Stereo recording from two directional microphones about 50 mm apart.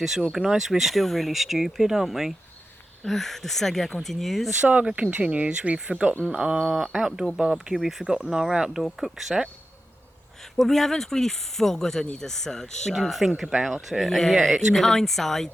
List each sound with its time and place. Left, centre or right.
0.0 s speech: centre
3.1 s speech: centre
5.1 s speech: right; by 9.4 s centre
10.7 s speech: centre
13.0 s speech: centre